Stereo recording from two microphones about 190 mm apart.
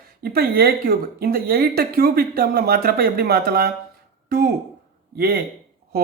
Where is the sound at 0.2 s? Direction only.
55° right (ahead or behind).